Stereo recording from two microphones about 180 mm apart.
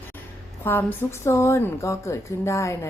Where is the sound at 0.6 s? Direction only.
10° left (ahead or behind).